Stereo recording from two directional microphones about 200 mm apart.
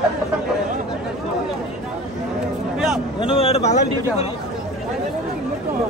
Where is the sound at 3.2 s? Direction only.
30° left (ahead or behind).